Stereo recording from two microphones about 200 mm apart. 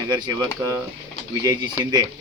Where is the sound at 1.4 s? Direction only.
20° right (ahead or behind).